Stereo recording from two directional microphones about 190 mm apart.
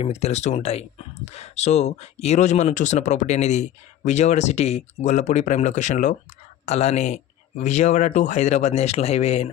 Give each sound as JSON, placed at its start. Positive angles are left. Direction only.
{"t": 0.0, "sound": "speech", "side_deg": 35}